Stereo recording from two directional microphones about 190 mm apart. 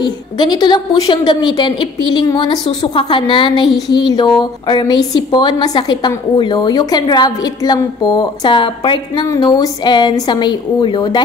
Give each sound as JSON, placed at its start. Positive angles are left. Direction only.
{"t": 0.0, "sound": "a woman's voice", "side_deg": 25}